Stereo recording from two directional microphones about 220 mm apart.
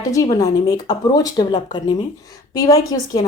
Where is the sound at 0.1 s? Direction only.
15° left (ahead or behind).